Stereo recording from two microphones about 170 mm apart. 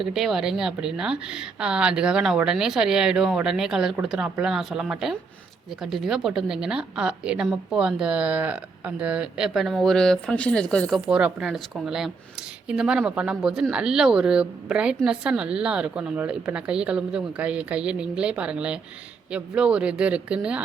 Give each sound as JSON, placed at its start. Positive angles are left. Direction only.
{"t": 0.0, "sound": "a woman's voice", "side_deg": 0}